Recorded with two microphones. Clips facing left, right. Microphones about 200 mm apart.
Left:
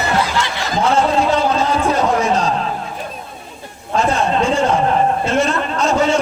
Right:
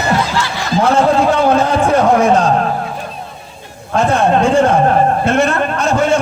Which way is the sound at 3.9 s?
55° right (ahead or behind).